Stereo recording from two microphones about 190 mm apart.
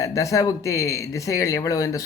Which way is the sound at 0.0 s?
15° left (ahead or behind).